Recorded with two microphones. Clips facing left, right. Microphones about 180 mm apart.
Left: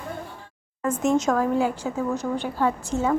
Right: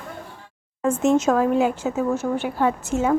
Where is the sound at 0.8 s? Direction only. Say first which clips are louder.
Right 3 dB; 25° right (ahead or behind).